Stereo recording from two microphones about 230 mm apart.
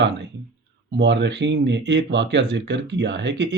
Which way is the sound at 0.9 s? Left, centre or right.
Right.